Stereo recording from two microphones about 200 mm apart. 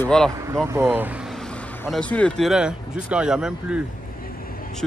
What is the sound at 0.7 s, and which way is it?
Speech, 10° right (ahead or behind).